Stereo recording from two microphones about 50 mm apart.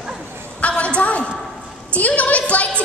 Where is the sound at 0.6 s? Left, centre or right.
Left.